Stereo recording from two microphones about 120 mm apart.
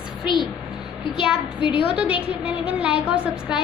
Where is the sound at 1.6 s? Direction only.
45° left (ahead or behind).